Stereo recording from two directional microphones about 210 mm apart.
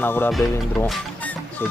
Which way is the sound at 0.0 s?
10° left (ahead or behind).